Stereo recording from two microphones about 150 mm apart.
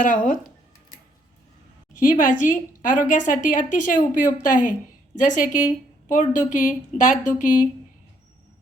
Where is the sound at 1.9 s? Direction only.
65° left (ahead or behind).